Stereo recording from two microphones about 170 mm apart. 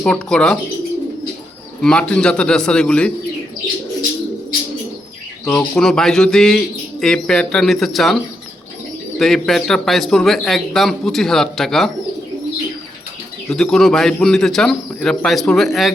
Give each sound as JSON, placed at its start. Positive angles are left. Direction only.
{"t": 0.0, "sound": "a man's voice", "side_deg": 5}
{"t": 1.8, "sound": "a man's voice", "side_deg": 5}
{"t": 5.5, "sound": "a man's voice", "side_deg": 5}
{"t": 13.5, "sound": "a man's voice", "side_deg": 0}